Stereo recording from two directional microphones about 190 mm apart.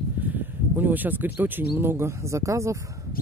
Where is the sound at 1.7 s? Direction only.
10° right (ahead or behind).